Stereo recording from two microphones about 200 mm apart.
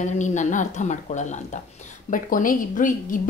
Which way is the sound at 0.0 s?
40° left (ahead or behind).